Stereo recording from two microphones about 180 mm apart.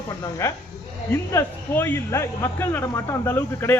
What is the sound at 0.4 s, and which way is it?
Speech, 15° left (ahead or behind).